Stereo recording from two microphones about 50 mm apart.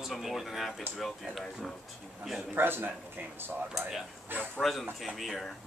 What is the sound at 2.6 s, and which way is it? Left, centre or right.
Speech, right.